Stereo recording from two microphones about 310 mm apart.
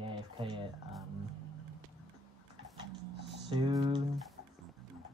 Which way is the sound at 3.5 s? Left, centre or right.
Centre.